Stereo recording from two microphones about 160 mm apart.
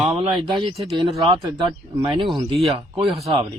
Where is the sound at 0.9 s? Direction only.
30° right (ahead or behind).